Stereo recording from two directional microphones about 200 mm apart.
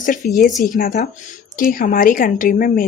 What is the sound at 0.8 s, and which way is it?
Speech, 45° left (ahead or behind).